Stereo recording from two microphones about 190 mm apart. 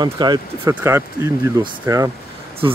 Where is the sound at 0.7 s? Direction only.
10° right (ahead or behind).